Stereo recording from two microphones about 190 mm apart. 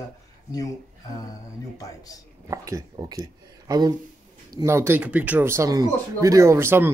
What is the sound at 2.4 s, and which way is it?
Speech, 15° right (ahead or behind).